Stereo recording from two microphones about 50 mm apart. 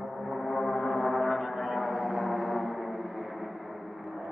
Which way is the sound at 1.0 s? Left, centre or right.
Centre.